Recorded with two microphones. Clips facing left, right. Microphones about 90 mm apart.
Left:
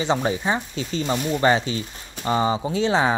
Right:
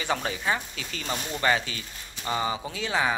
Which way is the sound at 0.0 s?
25° left (ahead or behind).